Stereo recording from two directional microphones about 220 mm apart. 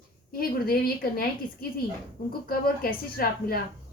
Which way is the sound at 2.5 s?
40° left (ahead or behind).